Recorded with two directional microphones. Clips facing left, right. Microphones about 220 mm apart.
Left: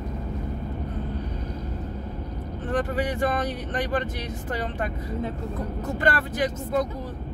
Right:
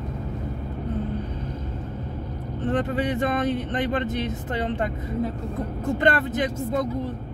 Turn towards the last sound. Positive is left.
turn(degrees=-20)  # may be behind; listen again after turning